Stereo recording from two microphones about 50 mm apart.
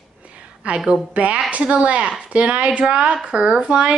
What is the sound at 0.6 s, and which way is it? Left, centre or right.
A woman's voice, centre.